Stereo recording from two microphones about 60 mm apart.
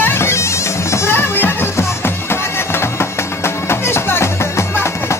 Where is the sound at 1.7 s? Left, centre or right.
Left.